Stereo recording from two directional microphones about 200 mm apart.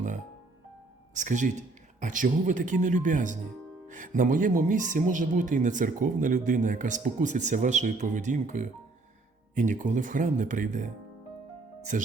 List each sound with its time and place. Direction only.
1.1 s speech: 40° right (ahead or behind)